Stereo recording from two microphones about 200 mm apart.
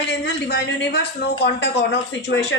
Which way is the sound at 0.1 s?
60° left (ahead or behind).